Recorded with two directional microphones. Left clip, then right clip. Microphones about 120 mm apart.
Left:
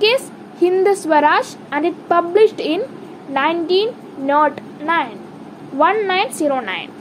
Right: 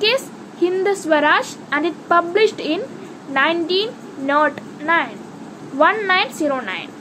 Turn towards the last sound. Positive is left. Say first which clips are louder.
# left 2 dB
turn(degrees=30)  # may be behind; listen again after turning